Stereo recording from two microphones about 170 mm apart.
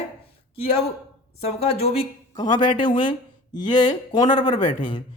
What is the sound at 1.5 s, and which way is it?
Speech, 35° left (ahead or behind).